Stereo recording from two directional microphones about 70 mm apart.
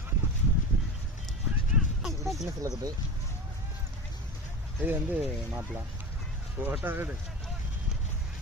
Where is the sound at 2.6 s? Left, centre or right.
Right.